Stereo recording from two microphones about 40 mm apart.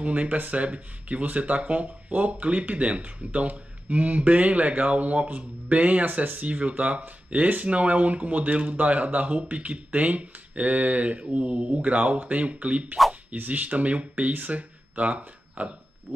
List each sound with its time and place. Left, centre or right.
0.0 s speech: right
11.2 s speech: right